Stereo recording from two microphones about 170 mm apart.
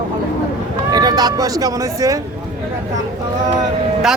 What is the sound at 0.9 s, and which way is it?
Speech, 25° right (ahead or behind).